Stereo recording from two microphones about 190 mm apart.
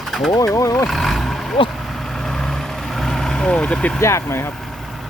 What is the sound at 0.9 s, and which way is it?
Vehicle, centre (ahead or behind).